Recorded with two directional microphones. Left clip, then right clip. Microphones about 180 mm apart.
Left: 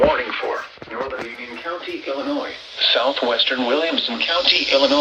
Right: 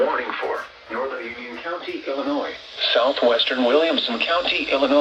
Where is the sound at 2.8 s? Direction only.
15° right (ahead or behind).